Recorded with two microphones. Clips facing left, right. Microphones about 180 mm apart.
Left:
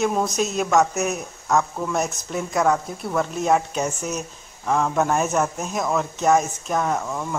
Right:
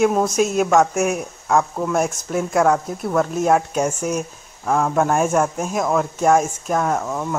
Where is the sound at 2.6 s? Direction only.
5° right (ahead or behind).